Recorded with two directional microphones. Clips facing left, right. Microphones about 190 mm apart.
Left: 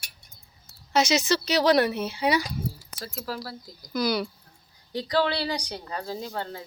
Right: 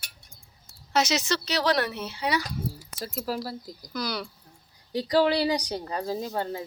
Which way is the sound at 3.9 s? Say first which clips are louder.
Left 6 dB; 10° left (ahead or behind).